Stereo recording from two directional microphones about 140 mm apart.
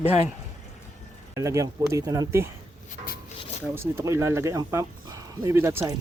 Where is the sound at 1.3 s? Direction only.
20° right (ahead or behind).